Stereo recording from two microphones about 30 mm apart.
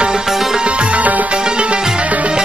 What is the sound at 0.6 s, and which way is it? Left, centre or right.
Music, right.